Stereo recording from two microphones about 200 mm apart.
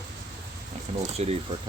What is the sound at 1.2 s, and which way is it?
Speech, 35° right (ahead or behind).